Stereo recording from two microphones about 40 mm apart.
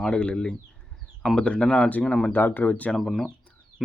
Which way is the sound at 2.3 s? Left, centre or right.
Left.